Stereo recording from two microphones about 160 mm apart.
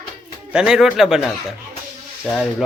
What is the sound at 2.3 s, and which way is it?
Speech, centre (ahead or behind).